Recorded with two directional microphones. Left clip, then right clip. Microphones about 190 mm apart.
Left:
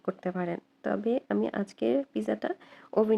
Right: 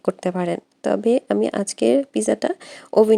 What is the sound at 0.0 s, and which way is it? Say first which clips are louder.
Speech: right 10 dB; 45° right (ahead or behind).